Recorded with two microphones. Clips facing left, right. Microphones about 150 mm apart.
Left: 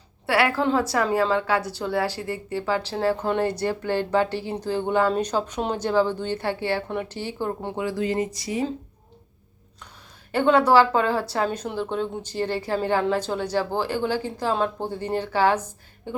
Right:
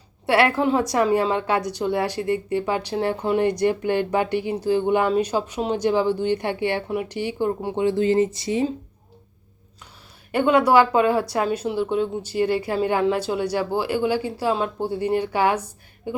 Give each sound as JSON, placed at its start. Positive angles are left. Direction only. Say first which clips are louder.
{"t": 0.3, "sound": "speech", "louder": "right 3 dB", "side_deg": -25}
{"t": 7.8, "sound": "speech", "louder": "right 7 dB", "side_deg": -25}
{"t": 10.3, "sound": "speech", "louder": "right 1 dB", "side_deg": -10}